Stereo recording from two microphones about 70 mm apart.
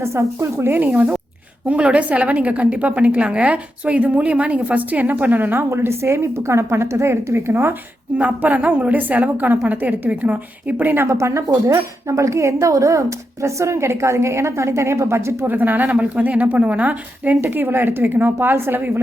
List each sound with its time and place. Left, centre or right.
0.0 s speech: right
0.6 s speech: right
0.9 s a woman's voice: centre
8.2 s a woman's voice: right
15.4 s a woman's voice: right